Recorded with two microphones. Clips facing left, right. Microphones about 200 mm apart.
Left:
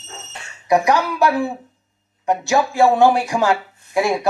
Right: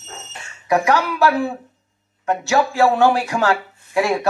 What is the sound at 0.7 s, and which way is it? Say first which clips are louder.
Speech: left 1 dB; 15° left (ahead or behind).